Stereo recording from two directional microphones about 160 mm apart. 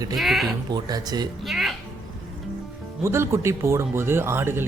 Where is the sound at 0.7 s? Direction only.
25° right (ahead or behind).